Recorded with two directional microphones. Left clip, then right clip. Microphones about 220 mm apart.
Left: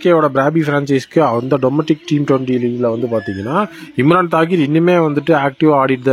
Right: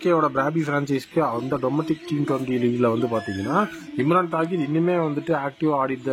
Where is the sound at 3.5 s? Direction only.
45° left (ahead or behind).